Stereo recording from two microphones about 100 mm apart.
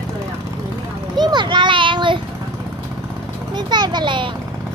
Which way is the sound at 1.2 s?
45° right (ahead or behind).